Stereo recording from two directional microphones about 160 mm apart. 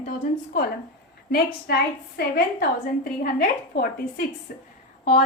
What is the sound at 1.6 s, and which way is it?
A woman's voice, 80° left.